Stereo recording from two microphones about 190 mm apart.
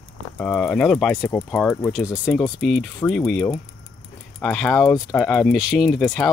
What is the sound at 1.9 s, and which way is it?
Speech, 5° right (ahead or behind).